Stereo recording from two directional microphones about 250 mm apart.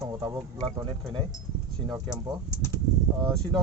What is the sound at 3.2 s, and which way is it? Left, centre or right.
Speech, centre.